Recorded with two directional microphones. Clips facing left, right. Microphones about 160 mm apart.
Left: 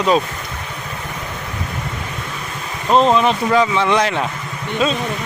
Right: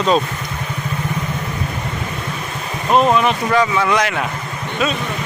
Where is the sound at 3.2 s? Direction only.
25° left (ahead or behind).